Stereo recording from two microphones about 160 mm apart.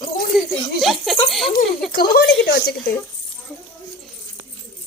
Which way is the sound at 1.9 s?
65° left (ahead or behind).